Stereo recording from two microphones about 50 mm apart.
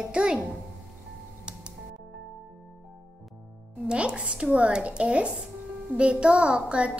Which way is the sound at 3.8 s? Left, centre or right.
Right.